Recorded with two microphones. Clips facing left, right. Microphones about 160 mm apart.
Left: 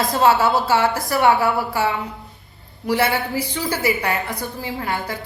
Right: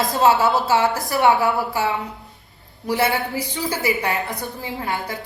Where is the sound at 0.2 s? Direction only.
20° right (ahead or behind).